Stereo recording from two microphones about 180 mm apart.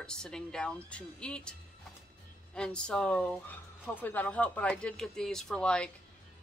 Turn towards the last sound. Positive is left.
turn(degrees=5)  # may be behind; listen again after turning